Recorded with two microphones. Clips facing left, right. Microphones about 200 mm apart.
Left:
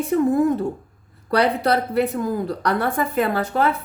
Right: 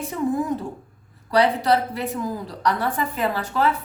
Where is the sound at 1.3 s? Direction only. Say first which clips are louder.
Even; 60° left (ahead or behind).